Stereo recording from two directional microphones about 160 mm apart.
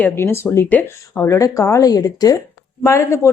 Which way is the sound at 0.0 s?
15° left (ahead or behind).